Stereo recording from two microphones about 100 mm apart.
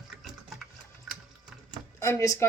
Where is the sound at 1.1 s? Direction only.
Centre (ahead or behind).